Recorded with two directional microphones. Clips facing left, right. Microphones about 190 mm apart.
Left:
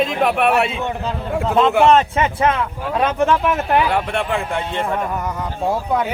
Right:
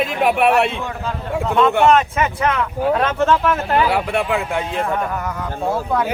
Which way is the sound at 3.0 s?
15° left (ahead or behind).